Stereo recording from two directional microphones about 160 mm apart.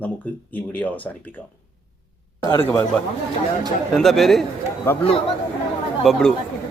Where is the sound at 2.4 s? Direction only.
20° left (ahead or behind).